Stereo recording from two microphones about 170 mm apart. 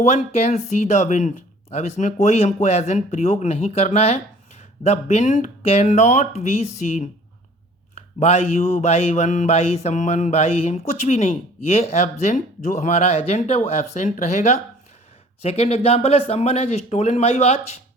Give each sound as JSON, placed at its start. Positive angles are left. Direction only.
{"t": 0.0, "sound": "speech", "side_deg": 40}